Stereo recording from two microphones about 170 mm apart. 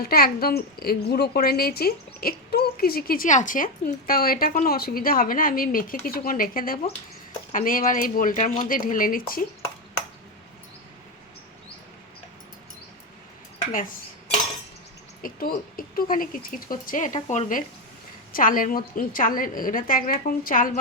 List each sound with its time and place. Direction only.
0.1 s a woman's voice: 65° left (ahead or behind)
15.2 s a woman's voice: 60° left (ahead or behind)
18.3 s a woman's voice: 55° left (ahead or behind)